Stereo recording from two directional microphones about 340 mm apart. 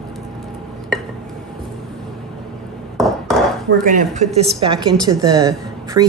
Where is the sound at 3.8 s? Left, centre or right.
Right.